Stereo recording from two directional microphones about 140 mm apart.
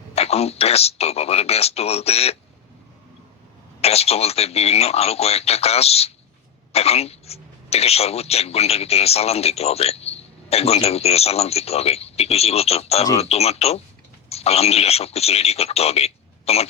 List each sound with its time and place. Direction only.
0.1 s speech: 50° left (ahead or behind)
3.8 s speech: 45° left (ahead or behind)